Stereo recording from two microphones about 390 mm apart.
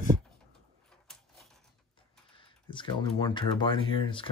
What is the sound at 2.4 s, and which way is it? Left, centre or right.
Speech, centre.